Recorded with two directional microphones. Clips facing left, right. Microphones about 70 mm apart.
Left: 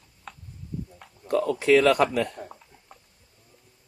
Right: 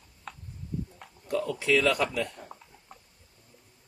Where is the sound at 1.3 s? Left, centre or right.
Left.